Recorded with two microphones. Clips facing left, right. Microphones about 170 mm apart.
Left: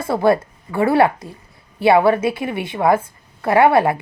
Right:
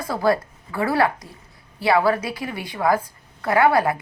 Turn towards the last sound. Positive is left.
turn(degrees=25)  # may be behind; listen again after turning